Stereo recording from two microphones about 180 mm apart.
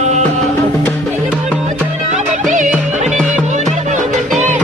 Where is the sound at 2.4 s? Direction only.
45° right (ahead or behind).